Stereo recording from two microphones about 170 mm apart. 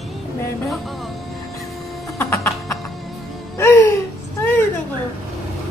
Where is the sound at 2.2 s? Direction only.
15° left (ahead or behind).